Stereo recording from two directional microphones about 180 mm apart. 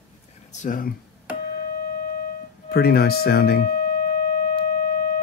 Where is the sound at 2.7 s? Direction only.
60° left (ahead or behind).